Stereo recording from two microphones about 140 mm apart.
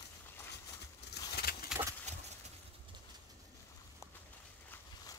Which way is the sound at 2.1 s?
55° right (ahead or behind).